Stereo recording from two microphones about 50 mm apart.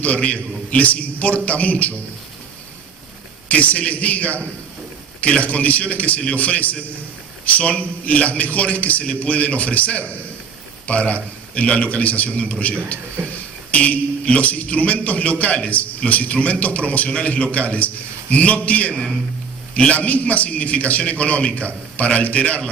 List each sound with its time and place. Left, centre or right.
0.0 s a man's voice: left
3.5 s a man's voice: left